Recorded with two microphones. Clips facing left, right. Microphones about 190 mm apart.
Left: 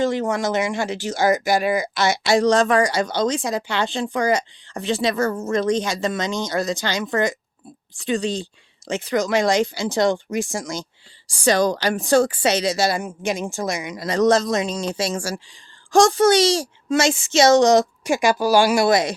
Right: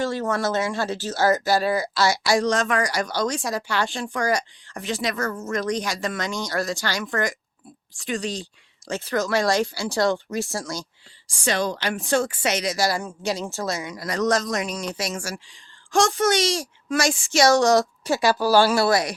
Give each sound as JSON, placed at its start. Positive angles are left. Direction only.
{"t": 0.0, "sound": "speech", "side_deg": 15}
{"t": 11.3, "sound": "speech", "side_deg": 40}